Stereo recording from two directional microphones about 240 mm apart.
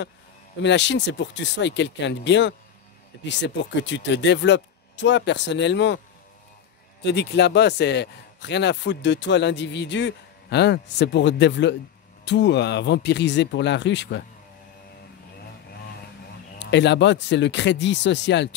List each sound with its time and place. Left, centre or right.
0.6 s a man's voice: left
7.0 s a man's voice: left
16.5 s a man's voice: left